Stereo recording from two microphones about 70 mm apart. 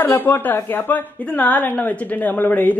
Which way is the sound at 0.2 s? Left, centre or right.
Left.